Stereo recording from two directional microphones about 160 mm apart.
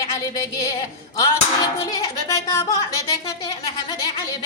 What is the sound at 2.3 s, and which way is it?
Speech, 15° left (ahead or behind).